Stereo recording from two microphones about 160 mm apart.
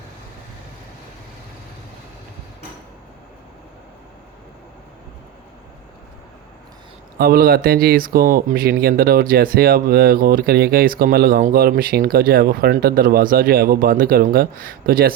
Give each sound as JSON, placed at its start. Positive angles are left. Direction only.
{"t": 7.2, "sound": "speech", "side_deg": -70}